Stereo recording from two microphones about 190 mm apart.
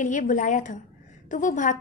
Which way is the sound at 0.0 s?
40° left (ahead or behind).